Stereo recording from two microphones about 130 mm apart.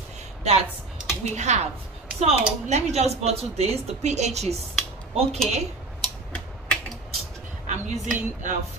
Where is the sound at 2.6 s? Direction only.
55° right (ahead or behind).